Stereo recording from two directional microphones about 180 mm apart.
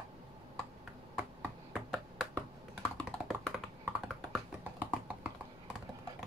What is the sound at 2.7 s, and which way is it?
Computer keyboard, centre (ahead or behind).